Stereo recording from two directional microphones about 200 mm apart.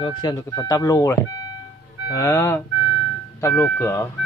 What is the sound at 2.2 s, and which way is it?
Speech, 15° left (ahead or behind).